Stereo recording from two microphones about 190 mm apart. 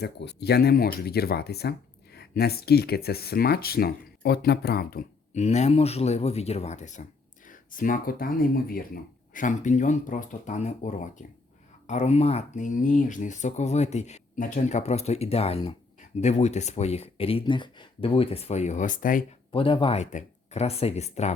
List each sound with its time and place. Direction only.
0.0 s speech: 60° left (ahead or behind)
5.3 s speech: 35° left (ahead or behind)
19.5 s speech: 25° left (ahead or behind)